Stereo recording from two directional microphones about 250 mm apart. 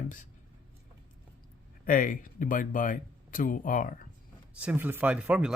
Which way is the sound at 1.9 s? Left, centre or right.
Left.